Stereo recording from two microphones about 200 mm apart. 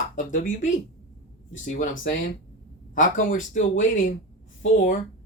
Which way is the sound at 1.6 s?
40° left (ahead or behind).